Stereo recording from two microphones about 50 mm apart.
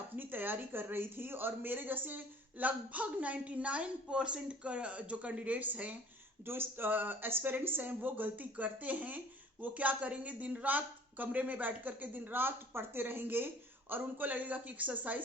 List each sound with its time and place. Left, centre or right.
0.2 s speech: right
6.4 s speech: right